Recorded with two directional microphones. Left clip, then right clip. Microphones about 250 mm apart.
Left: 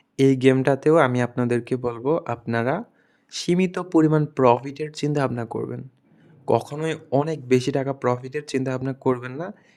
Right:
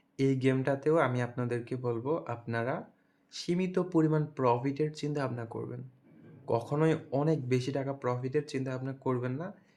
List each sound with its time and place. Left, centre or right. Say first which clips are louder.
0.2 s speech: left 12 dB; left